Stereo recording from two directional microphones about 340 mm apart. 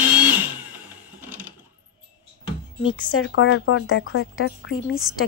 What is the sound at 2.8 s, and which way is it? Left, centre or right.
A woman's voice, left.